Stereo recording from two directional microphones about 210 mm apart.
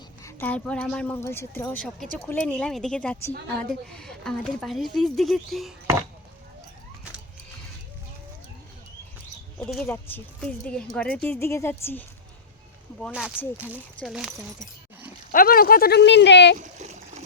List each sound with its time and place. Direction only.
0.2 s a woman's voice: 10° left (ahead or behind)
9.6 s a woman's voice: centre (ahead or behind)
13.1 s speech: 5° right (ahead or behind)
15.3 s speech: 40° left (ahead or behind)
16.6 s a sound: 35° right (ahead or behind)